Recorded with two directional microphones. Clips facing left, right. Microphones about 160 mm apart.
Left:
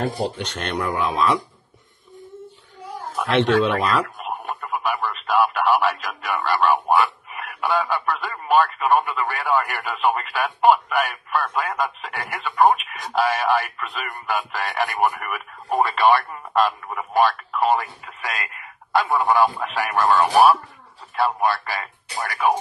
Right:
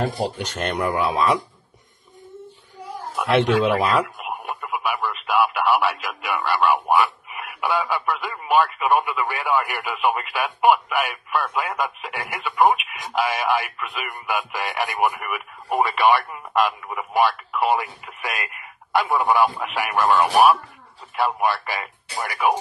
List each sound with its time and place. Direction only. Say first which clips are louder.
0.4 s speech: right 2 dB; 10° right (ahead or behind)
3.2 s speech: even; 10° right (ahead or behind)